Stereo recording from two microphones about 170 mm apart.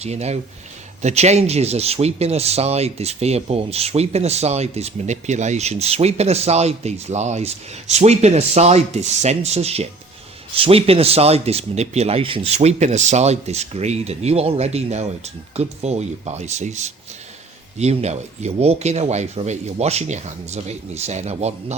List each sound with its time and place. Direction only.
0.0 s speech: 40° right (ahead or behind)